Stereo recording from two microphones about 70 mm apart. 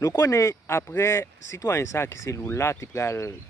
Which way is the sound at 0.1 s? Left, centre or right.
Left.